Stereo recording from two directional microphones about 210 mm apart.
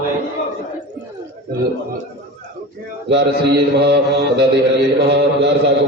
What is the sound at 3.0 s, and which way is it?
Mantra, 55° right (ahead or behind).